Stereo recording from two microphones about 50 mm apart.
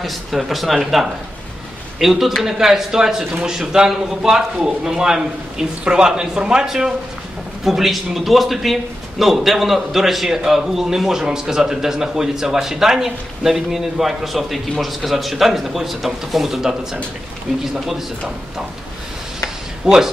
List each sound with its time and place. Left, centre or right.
0.0 s a man's voice: centre
7.6 s a man's voice: centre
19.8 s speech: centre